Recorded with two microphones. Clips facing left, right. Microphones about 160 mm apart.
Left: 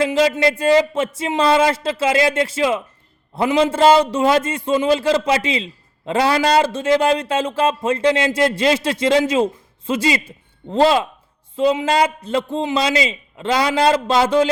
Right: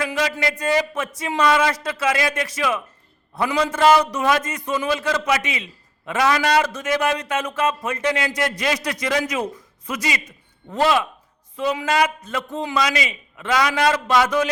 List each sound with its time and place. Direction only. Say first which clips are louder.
0.0 s a man's voice: left 7 dB; 25° left (ahead or behind)